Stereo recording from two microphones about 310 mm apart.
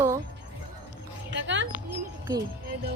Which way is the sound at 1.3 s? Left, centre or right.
Right.